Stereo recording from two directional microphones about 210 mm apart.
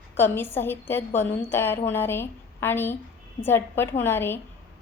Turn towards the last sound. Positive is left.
turn(degrees=10)  # may be behind; listen again after turning